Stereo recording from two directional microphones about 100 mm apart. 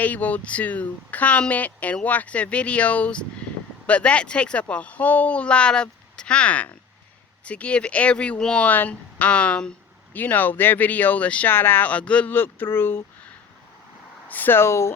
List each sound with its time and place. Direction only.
0.0 s speech: 15° left (ahead or behind)
14.3 s speech: 20° left (ahead or behind)